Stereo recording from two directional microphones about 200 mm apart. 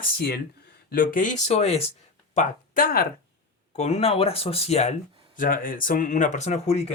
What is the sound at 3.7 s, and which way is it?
Speech, 35° left (ahead or behind).